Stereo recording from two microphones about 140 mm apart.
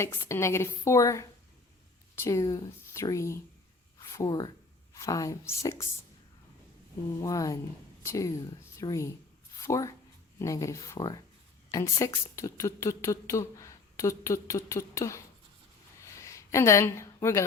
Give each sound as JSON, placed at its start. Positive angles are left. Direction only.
{"t": 0.0, "sound": "speech", "side_deg": 20}
{"t": 7.1, "sound": "speech", "side_deg": 25}
{"t": 16.0, "sound": "a sound", "side_deg": 20}